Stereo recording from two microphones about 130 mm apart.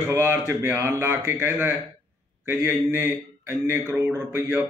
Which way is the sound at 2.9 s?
20° right (ahead or behind).